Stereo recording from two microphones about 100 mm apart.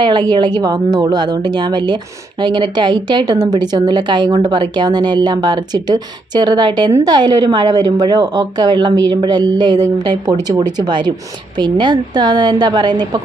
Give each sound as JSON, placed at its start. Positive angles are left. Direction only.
{"t": 0.0, "sound": "a woman's voice", "side_deg": -50}